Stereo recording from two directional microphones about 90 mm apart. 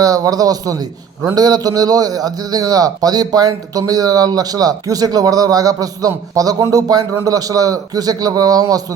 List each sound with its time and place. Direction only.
0.0 s a man's voice: 45° right (ahead or behind)